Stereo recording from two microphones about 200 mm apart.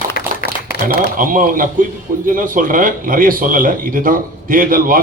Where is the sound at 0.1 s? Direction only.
50° left (ahead or behind).